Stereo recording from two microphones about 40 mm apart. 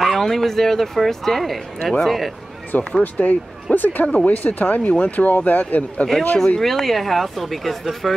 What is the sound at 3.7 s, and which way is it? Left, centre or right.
Speech, left.